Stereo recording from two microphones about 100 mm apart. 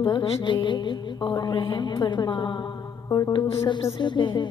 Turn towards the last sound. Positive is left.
turn(degrees=50)  # may be behind; listen again after turning